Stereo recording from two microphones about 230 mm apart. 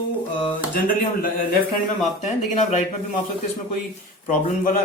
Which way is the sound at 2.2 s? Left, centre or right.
Left.